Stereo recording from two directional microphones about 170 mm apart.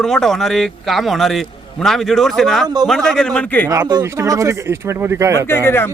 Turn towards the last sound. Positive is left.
turn(degrees=15)  # may be behind; listen again after turning